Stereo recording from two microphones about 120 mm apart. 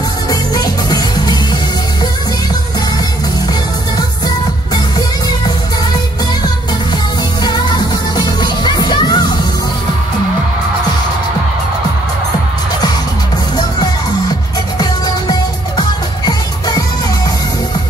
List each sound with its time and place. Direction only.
0.3 s music: 30° left (ahead or behind)
7.4 s music: 35° left (ahead or behind)
16.3 s music: 35° left (ahead or behind)